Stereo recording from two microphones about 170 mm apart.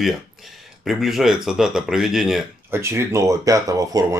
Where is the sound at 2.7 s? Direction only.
15° right (ahead or behind).